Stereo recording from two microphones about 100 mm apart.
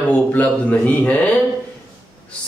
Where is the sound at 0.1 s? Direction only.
15° left (ahead or behind).